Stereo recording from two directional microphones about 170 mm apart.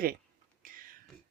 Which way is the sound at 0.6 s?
55° right (ahead or behind).